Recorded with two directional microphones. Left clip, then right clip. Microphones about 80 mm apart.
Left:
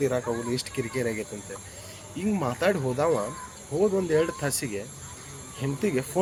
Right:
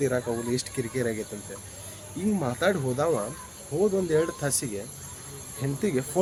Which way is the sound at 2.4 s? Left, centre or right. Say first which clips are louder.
Left 1 dB; right.